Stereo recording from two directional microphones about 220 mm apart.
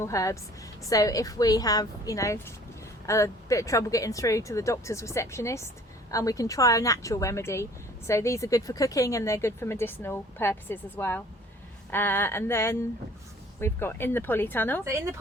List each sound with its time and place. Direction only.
0.0 s speech: 15° left (ahead or behind)